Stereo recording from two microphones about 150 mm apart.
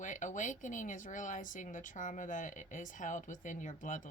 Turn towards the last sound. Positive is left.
turn(degrees=60)  # may be behind; listen again after turning